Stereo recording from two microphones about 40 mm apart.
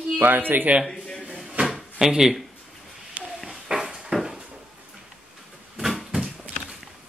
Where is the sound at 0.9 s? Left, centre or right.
Centre.